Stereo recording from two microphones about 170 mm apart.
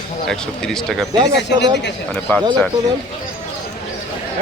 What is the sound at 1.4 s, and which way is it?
Speech, 90° left.